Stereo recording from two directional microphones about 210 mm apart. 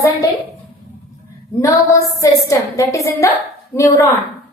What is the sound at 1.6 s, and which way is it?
Female singing, 15° left (ahead or behind).